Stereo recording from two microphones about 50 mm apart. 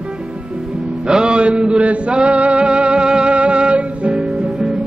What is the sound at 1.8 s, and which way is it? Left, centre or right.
Male singing, right.